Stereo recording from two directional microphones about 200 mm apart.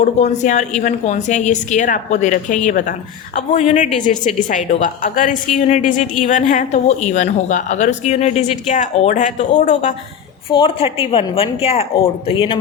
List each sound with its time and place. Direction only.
0.0 s a woman's voice: 35° left (ahead or behind)
10.5 s speech: 25° left (ahead or behind)